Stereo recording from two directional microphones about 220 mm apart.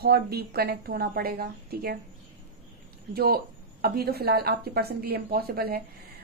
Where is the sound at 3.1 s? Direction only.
45° right (ahead or behind).